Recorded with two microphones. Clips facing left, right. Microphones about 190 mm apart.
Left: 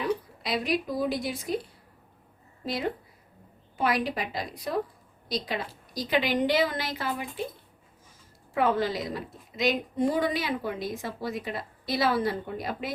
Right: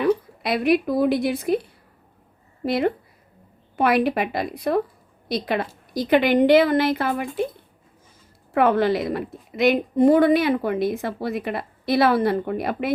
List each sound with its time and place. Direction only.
0.0 s speech: 60° right (ahead or behind)
2.6 s a woman's voice: 60° right (ahead or behind)
8.5 s a woman's voice: 65° right (ahead or behind)